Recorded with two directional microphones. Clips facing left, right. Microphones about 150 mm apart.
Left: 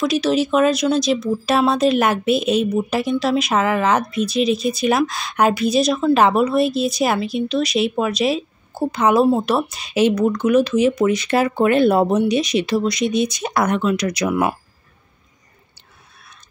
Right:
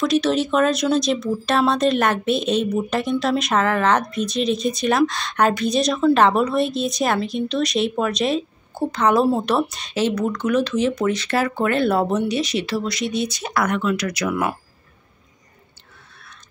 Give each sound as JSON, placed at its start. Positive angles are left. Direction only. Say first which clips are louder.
{"t": 0.0, "sound": "speech", "louder": "left 1 dB", "side_deg": 5}
{"t": 9.9, "sound": "speech", "louder": "left 5 dB", "side_deg": 15}